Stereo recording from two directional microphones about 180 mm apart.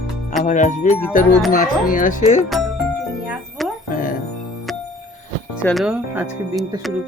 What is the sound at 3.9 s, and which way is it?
Speech, 50° left (ahead or behind).